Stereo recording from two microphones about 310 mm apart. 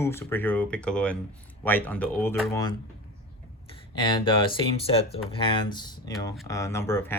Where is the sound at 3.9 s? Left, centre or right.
Centre.